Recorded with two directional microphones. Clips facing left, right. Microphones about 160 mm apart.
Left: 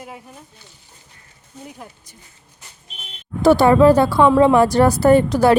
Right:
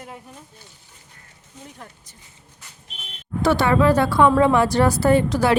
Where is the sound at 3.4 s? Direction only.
35° left (ahead or behind).